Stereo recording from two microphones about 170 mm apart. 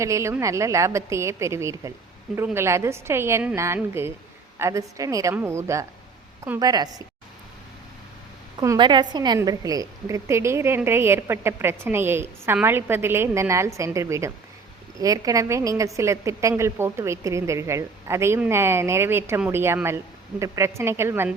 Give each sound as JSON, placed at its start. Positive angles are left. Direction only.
{"t": 0.0, "sound": "a woman's voice", "side_deg": -15}
{"t": 8.6, "sound": "a woman's voice", "side_deg": -25}